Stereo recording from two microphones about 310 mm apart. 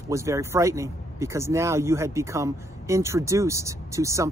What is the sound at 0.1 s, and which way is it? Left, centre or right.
Speech, centre.